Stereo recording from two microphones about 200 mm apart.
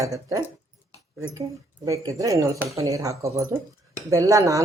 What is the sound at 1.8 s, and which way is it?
Speech, 15° right (ahead or behind).